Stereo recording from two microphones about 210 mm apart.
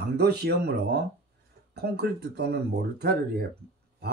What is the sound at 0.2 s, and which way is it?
Speech, 50° right (ahead or behind).